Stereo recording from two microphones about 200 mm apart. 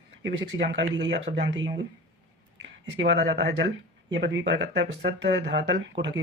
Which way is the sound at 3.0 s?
60° right (ahead or behind).